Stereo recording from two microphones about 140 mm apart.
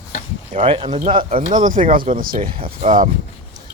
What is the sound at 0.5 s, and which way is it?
Speech, 40° right (ahead or behind).